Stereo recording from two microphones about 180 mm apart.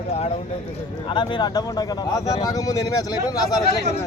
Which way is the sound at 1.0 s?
25° left (ahead or behind).